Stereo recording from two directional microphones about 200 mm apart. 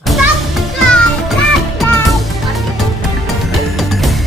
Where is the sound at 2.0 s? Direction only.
Centre (ahead or behind).